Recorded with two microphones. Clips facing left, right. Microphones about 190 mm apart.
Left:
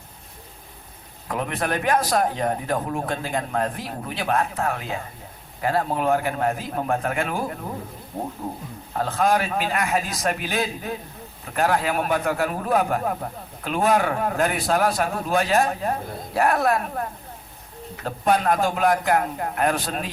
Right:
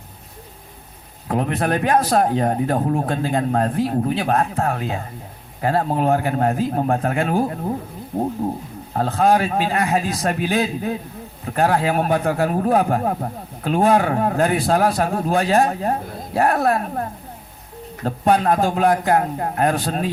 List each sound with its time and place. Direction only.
1.3 s a man's voice: 35° right (ahead or behind)
8.9 s a man's voice: 40° right (ahead or behind)